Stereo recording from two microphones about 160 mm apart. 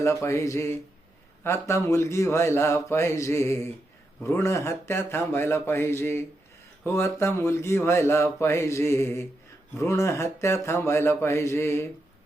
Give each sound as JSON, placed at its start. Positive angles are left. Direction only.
{"t": 0.0, "sound": "speech", "side_deg": 20}